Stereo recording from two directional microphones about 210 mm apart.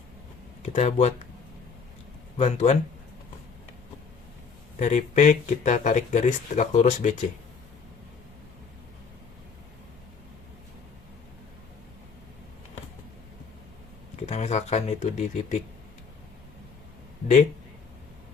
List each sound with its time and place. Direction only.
0.6 s speech: 30° left (ahead or behind)
2.4 s speech: 35° left (ahead or behind)
4.8 s speech: 35° left (ahead or behind)
14.3 s speech: 30° left (ahead or behind)